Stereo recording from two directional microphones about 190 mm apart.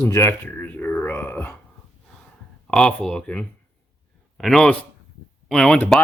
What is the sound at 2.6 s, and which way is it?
Speech, 5° left (ahead or behind).